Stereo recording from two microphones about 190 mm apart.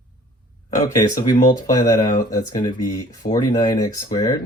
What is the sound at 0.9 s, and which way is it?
Speech, 20° left (ahead or behind).